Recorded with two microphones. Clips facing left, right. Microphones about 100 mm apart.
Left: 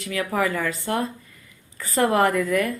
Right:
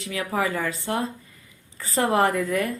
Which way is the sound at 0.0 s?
25° right (ahead or behind).